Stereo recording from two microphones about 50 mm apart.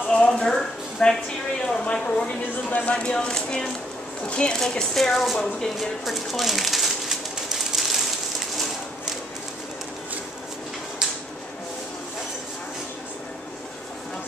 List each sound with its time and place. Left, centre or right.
0.1 s a sound: centre
1.6 s speech: left
6.0 s bird: centre